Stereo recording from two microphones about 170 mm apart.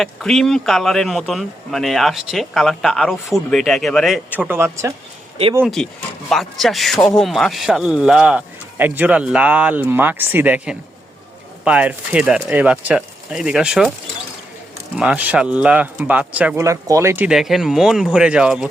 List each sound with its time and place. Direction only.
0.0 s speech: centre (ahead or behind)
4.4 s speech: 15° right (ahead or behind)
5.6 s speech: 5° left (ahead or behind)
14.9 s speech: 5° right (ahead or behind)
16.6 s speech: 20° right (ahead or behind)
17.2 s speech: centre (ahead or behind)